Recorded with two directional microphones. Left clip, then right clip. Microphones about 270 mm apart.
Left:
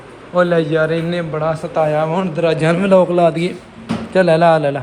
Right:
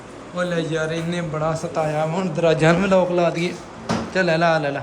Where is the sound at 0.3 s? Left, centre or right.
Centre.